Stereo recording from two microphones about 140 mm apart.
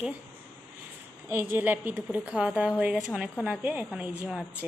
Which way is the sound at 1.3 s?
15° right (ahead or behind).